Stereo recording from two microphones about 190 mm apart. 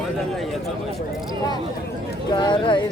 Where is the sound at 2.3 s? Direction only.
20° left (ahead or behind).